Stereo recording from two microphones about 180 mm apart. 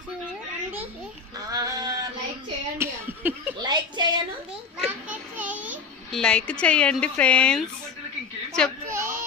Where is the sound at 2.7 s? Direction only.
15° right (ahead or behind).